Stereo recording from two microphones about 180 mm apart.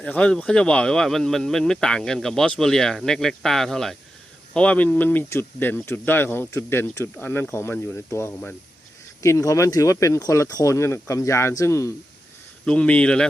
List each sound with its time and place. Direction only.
0.0 s speech: 5° left (ahead or behind)
12.6 s speech: 5° left (ahead or behind)